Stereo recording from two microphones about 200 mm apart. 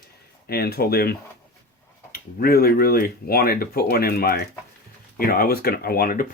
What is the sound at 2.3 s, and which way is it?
Speech, 50° left (ahead or behind).